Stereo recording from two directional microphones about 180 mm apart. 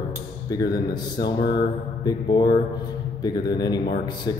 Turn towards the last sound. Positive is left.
turn(degrees=25)  # may be behind; listen again after turning